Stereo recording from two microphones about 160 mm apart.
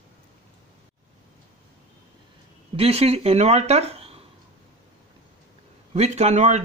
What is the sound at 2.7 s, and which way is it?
Speech, 40° right (ahead or behind).